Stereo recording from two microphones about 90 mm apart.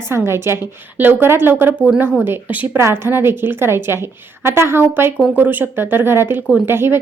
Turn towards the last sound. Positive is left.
turn(degrees=-25)  # may be behind; listen again after turning